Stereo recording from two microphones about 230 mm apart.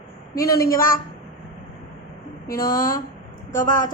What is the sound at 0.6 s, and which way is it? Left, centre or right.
Speech, left.